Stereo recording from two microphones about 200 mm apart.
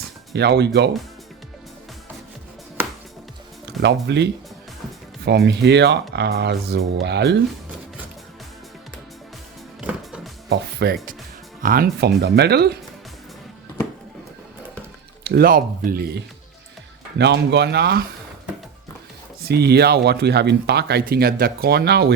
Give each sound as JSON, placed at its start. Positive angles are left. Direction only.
{"t": 0.3, "sound": "speech", "side_deg": -55}
{"t": 3.8, "sound": "speech", "side_deg": -60}
{"t": 10.5, "sound": "speech", "side_deg": -55}
{"t": 15.2, "sound": "speech", "side_deg": -50}
{"t": 17.2, "sound": "speech", "side_deg": -60}
{"t": 19.5, "sound": "speech", "side_deg": -55}